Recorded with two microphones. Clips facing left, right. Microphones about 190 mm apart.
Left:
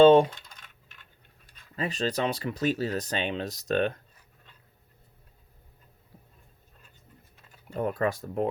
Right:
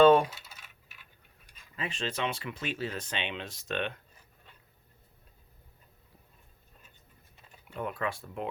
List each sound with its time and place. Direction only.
0.0 s speech: 25° left (ahead or behind)
0.3 s coin: 5° right (ahead or behind)
1.7 s speech: 40° left (ahead or behind)
7.7 s speech: 40° left (ahead or behind)